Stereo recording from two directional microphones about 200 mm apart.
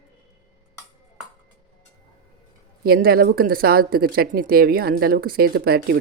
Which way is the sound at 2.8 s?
50° right (ahead or behind).